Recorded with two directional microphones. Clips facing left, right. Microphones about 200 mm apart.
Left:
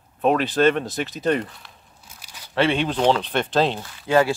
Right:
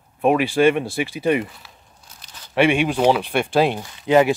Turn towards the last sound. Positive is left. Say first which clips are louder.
# right 3 dB
turn(degrees=-20)  # may be behind; listen again after turning